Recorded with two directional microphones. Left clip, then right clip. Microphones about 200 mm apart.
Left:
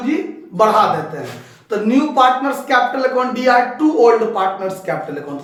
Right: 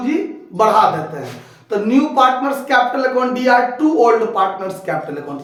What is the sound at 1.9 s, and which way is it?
A man's voice, 10° right (ahead or behind).